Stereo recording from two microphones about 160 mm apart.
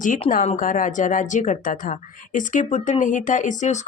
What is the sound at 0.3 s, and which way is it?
A woman's voice, 55° left (ahead or behind).